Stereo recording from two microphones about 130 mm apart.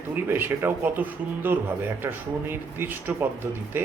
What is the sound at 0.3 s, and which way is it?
A man's voice, 15° right (ahead or behind).